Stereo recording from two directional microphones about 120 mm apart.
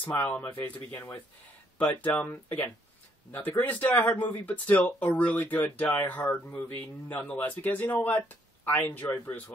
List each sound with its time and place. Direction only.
0.0 s speech: 15° left (ahead or behind)